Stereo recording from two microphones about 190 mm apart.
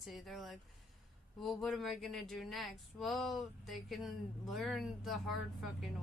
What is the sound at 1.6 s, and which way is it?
Speech, centre (ahead or behind).